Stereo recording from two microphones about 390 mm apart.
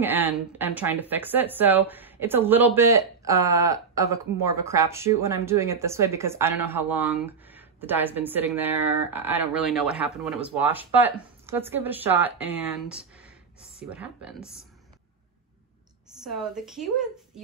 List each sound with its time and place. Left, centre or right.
0.0 s speech: centre
16.2 s speech: centre